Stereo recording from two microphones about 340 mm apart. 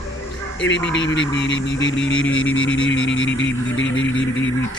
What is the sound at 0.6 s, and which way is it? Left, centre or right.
Speech, left.